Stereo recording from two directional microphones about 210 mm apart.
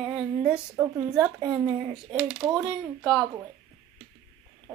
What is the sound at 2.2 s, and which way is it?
Speech, 25° right (ahead or behind).